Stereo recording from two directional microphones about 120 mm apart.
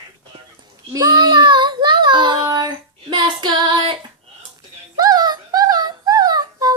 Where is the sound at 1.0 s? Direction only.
35° right (ahead or behind).